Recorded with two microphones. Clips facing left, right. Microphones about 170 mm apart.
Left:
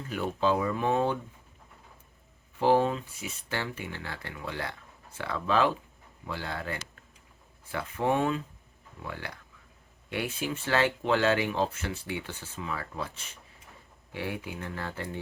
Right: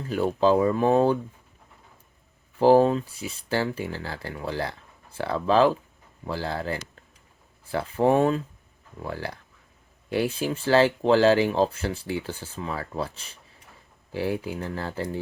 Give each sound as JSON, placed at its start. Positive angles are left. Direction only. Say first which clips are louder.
{"t": 0.1, "sound": "speech", "louder": "right 7 dB", "side_deg": -35}
{"t": 2.6, "sound": "speech", "louder": "right 7 dB", "side_deg": -35}